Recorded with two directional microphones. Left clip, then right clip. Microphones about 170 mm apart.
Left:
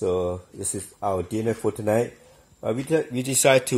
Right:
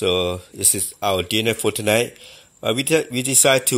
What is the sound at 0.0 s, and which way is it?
Speech, 30° right (ahead or behind).